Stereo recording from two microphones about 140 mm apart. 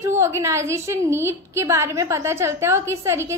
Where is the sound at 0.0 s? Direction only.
20° right (ahead or behind).